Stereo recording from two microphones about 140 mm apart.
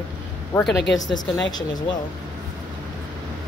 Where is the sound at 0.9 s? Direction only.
30° left (ahead or behind).